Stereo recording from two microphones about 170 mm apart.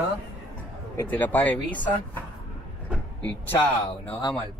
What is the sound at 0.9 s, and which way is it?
Speech, 10° left (ahead or behind).